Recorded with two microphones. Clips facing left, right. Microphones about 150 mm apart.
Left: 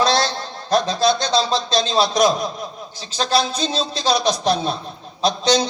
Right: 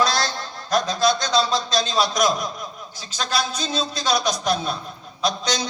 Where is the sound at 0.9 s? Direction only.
30° left (ahead or behind).